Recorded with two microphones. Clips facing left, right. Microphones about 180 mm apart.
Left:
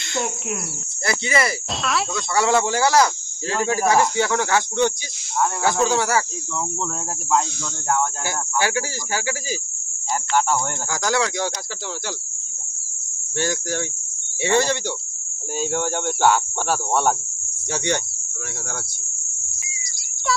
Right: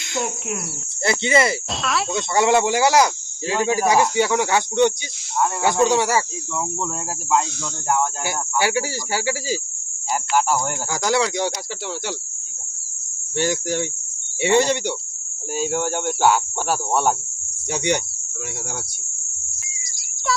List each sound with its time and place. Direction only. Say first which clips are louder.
0.0 s speech: even; 5° right (ahead or behind)
1.0 s speech: right 4 dB; 25° right (ahead or behind)
1.8 s speech: left 1 dB; centre (ahead or behind)
2.1 s speech: right 3 dB; 20° right (ahead or behind)
7.9 s speech: right 1 dB; 10° right (ahead or behind)
10.9 s speech: right 2 dB; 20° right (ahead or behind)
13.3 s speech: right 3 dB; 20° right (ahead or behind)
15.5 s speech: right 1 dB; 5° right (ahead or behind)